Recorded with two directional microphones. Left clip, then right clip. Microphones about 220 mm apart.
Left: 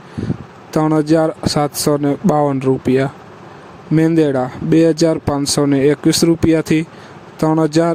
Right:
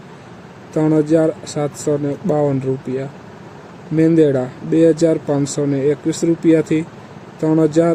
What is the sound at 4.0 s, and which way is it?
Speech, 40° left (ahead or behind).